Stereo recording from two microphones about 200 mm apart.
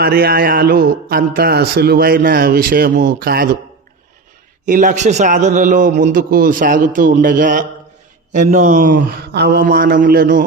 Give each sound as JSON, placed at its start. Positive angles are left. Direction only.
{"t": 0.0, "sound": "a man's voice", "side_deg": -50}
{"t": 4.6, "sound": "a man's voice", "side_deg": -40}